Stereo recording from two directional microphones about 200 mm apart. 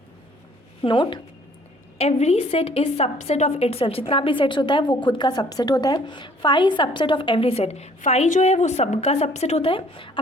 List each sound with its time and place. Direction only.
0.8 s a woman's voice: 25° left (ahead or behind)